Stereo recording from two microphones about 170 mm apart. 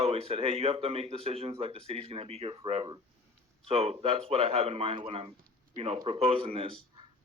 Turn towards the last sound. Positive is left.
turn(degrees=-30)  # may be behind; listen again after turning